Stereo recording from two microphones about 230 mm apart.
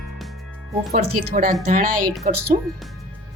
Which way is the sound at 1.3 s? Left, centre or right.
Right.